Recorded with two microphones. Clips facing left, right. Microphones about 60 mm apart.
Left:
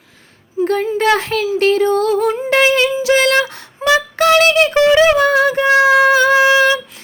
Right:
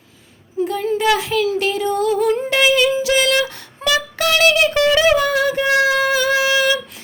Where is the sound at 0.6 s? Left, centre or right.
Left.